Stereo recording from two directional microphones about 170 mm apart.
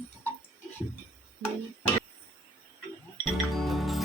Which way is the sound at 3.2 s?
Centre (ahead or behind).